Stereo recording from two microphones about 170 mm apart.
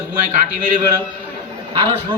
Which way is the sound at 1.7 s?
35° right (ahead or behind).